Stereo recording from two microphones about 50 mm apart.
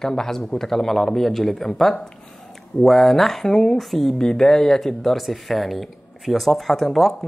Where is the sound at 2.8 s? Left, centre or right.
Centre.